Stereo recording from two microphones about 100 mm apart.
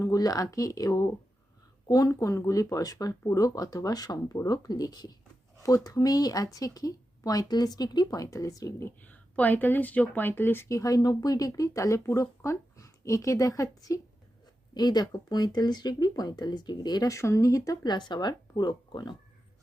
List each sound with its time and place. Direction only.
0.0 s speech: 35° left (ahead or behind)
9.0 s speech: 15° left (ahead or behind); by 17.7 s 35° left (ahead or behind)
17.8 s speech: 45° left (ahead or behind)